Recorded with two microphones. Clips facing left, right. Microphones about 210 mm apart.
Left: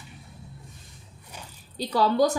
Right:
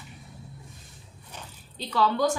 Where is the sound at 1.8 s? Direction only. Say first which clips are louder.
Left 3 dB; 40° left (ahead or behind).